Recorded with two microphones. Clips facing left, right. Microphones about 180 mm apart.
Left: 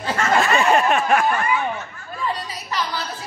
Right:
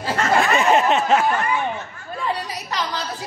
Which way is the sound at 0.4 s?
20° right (ahead or behind).